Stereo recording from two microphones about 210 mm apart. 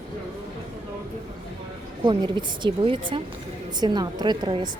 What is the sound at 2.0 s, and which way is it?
A woman's voice, 20° right (ahead or behind).